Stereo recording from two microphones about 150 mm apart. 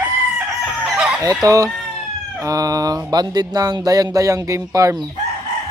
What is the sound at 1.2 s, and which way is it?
Music, 20° right (ahead or behind).